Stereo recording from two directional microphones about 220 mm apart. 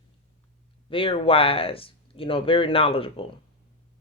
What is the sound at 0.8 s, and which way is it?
Speech, 25° left (ahead or behind).